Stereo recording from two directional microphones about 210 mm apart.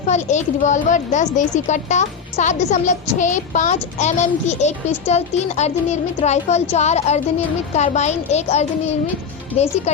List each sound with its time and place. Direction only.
0.1 s speech: 35° left (ahead or behind)